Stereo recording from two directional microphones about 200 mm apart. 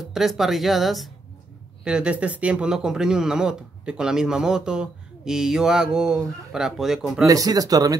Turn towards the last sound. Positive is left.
turn(degrees=-20)  # may be behind; listen again after turning